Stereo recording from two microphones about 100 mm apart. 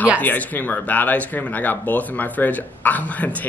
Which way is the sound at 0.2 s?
15° left (ahead or behind).